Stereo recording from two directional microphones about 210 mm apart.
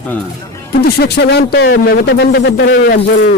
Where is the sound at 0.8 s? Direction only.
50° left (ahead or behind).